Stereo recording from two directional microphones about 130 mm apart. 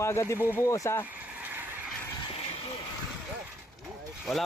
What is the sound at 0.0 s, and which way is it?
Speech, 20° left (ahead or behind).